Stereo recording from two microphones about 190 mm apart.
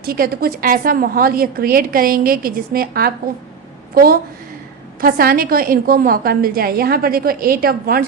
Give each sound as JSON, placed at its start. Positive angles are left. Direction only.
{"t": 0.0, "sound": "a woman's voice", "side_deg": -50}